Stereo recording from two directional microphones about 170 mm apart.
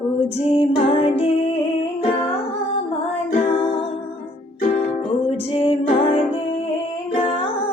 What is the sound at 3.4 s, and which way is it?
Music, 30° left (ahead or behind).